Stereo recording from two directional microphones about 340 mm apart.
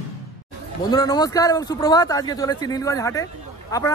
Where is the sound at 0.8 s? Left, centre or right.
Centre.